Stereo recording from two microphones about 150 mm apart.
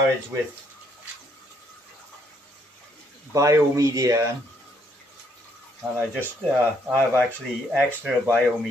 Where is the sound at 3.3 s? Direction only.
20° right (ahead or behind).